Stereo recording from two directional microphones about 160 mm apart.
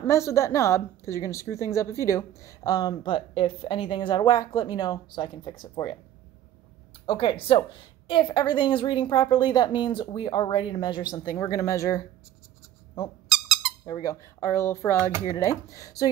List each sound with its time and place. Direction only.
0.0 s a woman's voice: 15° left (ahead or behind)
7.1 s a woman's voice: 30° left (ahead or behind)
13.3 s a sound: 5° right (ahead or behind)
13.8 s a woman's voice: 25° left (ahead or behind)